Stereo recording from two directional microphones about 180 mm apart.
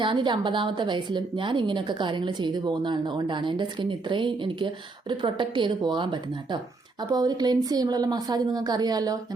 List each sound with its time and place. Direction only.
0.0 s a woman's voice: 25° right (ahead or behind)